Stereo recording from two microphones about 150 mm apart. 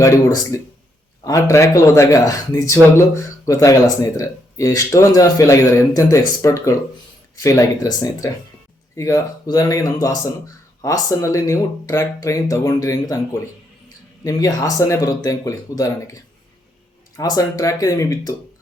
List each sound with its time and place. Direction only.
0.0 s speech: 25° left (ahead or behind)
14.3 s speech: 20° left (ahead or behind)